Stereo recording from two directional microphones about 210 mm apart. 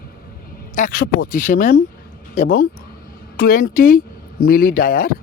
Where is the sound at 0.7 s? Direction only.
40° left (ahead or behind).